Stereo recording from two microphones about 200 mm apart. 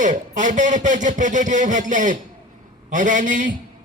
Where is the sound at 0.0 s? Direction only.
40° right (ahead or behind).